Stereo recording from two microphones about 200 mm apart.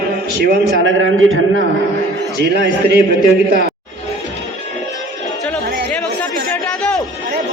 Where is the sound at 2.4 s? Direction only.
55° right (ahead or behind).